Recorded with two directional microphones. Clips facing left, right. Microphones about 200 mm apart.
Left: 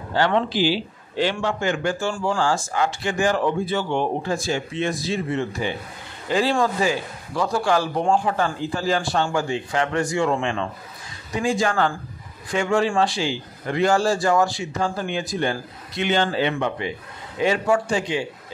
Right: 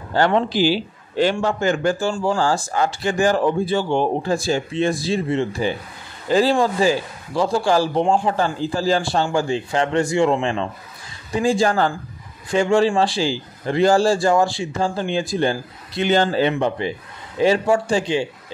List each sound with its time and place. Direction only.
0.1 s a man's voice: 45° right (ahead or behind)